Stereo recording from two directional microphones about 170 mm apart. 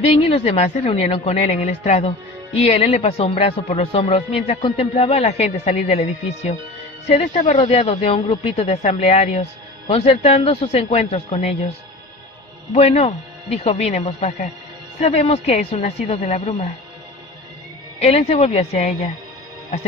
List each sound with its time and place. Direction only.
0.0 s a woman's voice: 35° left (ahead or behind)
12.7 s a woman's voice: 40° left (ahead or behind)
17.9 s a woman's voice: 35° left (ahead or behind)